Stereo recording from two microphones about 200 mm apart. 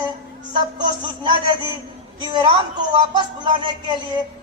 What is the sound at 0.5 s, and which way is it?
Speech, 20° right (ahead or behind).